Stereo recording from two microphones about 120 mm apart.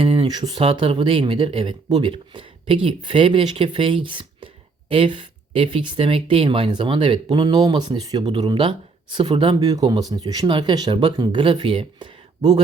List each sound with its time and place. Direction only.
0.0 s a sound: 55° right (ahead or behind)
0.3 s speech: 35° right (ahead or behind)
9.6 s speech: 30° right (ahead or behind)